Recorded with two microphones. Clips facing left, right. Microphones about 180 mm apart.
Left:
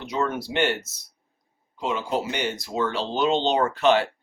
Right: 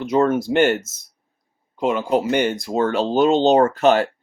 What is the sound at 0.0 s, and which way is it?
Speech, 50° right (ahead or behind).